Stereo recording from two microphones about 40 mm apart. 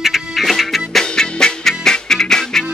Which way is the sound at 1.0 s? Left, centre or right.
Centre.